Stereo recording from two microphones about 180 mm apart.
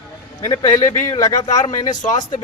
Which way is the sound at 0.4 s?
20° left (ahead or behind).